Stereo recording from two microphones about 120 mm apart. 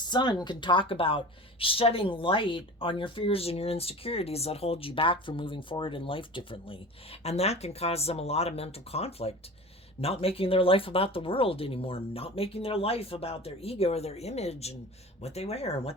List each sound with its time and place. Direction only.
0.0 s speech: 40° left (ahead or behind); by 16.0 s 55° left (ahead or behind)